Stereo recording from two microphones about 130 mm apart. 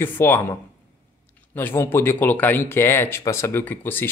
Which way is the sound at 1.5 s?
15° left (ahead or behind).